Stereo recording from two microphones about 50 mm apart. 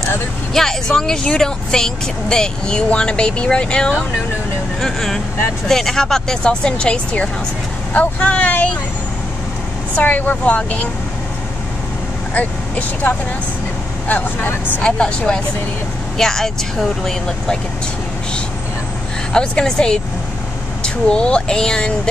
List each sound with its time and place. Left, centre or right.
0.5 s speech: centre
4.7 s speech: centre; by 8.7 s left
9.9 s speech: left
12.4 s speech: left
14.8 s speech: centre
19.3 s speech: centre